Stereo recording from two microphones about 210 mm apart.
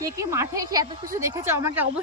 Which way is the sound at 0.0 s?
15° right (ahead or behind).